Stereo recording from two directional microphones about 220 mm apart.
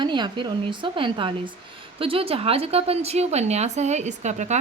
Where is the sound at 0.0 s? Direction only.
20° right (ahead or behind).